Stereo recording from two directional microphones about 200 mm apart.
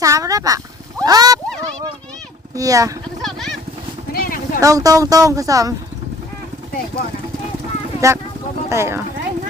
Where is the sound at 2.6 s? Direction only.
15° right (ahead or behind).